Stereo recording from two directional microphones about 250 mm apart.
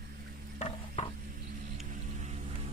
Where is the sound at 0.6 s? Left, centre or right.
Left.